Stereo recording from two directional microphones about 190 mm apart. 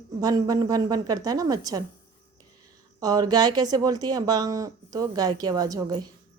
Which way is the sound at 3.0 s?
20° right (ahead or behind).